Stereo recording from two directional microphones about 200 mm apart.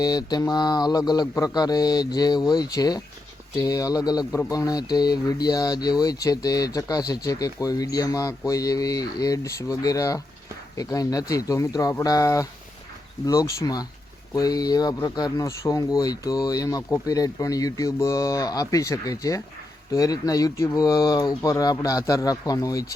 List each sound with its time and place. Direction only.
0.0 s speech: 20° left (ahead or behind)